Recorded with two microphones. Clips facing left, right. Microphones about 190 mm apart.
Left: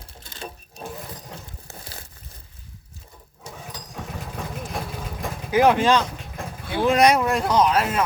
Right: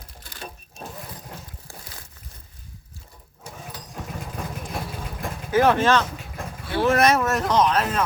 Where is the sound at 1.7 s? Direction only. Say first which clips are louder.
Left 2 dB; 20° left (ahead or behind).